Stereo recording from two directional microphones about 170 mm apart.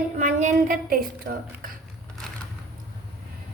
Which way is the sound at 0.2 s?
45° right (ahead or behind).